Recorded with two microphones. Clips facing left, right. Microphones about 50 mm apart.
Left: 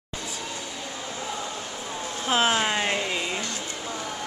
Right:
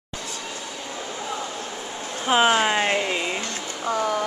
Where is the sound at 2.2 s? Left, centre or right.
Centre.